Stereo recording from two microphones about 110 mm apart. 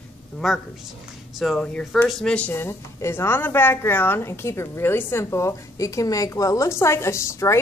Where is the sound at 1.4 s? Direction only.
5° left (ahead or behind).